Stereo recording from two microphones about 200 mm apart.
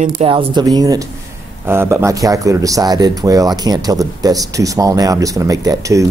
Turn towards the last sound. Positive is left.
turn(degrees=-15)  # may be behind; listen again after turning